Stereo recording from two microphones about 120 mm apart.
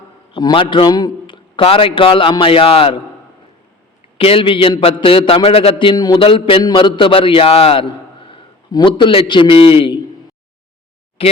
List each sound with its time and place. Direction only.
0.3 s a man's voice: 45° left (ahead or behind)
4.2 s a man's voice: 50° left (ahead or behind)
5.9 s a man's voice: 35° left (ahead or behind)
11.2 s speech: 50° left (ahead or behind)